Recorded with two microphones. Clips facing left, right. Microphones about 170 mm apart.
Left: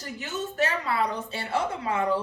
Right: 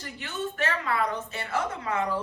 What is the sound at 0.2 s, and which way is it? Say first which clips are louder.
A woman's voice: left 3 dB; 40° left (ahead or behind).